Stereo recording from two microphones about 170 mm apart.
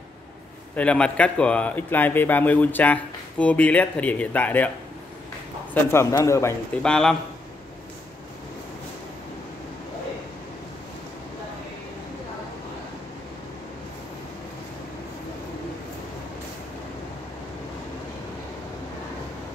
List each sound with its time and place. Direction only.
0.7 s speech: 5° left (ahead or behind)
5.9 s speech: 15° left (ahead or behind)
6.8 s a man's voice: 5° left (ahead or behind)